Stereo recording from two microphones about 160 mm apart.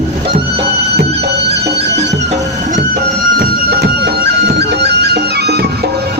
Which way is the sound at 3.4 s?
80° right.